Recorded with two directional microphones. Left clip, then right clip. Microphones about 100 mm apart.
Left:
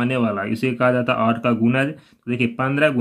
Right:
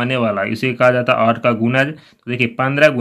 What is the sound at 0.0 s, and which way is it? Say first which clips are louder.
Speech: right 4 dB; 20° right (ahead or behind).